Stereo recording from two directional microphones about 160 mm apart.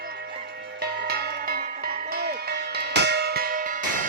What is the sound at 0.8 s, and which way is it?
Music, 80° right.